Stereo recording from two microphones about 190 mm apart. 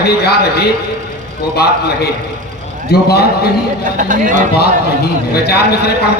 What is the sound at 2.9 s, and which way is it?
Speech, 55° left (ahead or behind).